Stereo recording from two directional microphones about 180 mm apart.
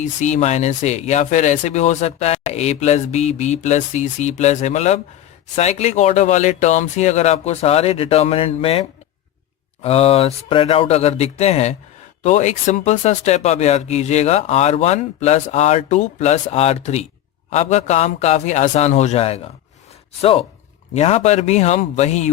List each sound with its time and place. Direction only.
0.0 s speech: 40° left (ahead or behind)
20.9 s speech: 35° left (ahead or behind)